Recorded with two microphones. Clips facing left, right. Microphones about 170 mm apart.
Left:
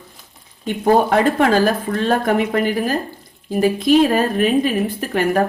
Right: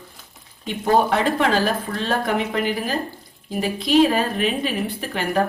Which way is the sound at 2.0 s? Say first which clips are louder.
Left 6 dB; 50° left (ahead or behind).